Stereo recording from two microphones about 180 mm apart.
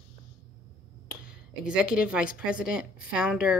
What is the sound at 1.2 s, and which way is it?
Speech, 5° right (ahead or behind).